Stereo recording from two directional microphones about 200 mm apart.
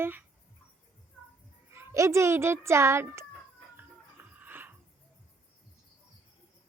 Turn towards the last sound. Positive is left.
turn(degrees=-10)  # may be behind; listen again after turning